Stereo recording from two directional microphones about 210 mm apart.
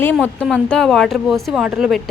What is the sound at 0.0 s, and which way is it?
A woman's voice, 5° left (ahead or behind).